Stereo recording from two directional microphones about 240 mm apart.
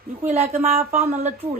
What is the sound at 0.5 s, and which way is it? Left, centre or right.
Speech, right.